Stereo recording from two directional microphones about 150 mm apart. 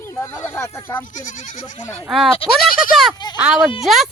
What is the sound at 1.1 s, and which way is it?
Speech, 60° left (ahead or behind).